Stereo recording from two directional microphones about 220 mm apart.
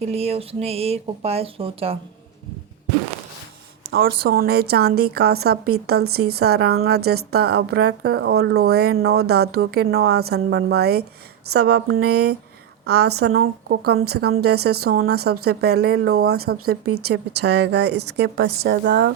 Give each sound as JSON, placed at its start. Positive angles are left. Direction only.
{"t": 0.0, "sound": "speech", "side_deg": -25}
{"t": 4.0, "sound": "a woman's voice", "side_deg": -45}
{"t": 13.2, "sound": "speech", "side_deg": -70}
{"t": 13.7, "sound": "speech", "side_deg": -45}